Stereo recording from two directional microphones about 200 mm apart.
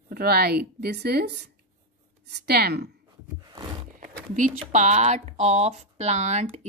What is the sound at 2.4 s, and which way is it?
Speech, 50° right (ahead or behind).